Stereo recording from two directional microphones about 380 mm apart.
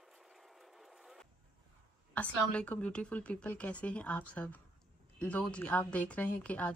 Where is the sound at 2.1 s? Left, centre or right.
Centre.